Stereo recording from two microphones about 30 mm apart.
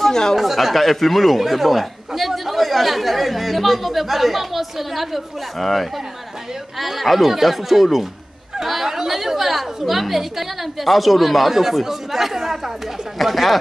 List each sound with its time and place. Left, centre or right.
0.0 s speech: centre
0.4 s a woman's voice: centre